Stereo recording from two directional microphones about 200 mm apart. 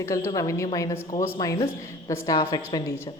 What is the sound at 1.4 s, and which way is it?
Speech, 15° left (ahead or behind).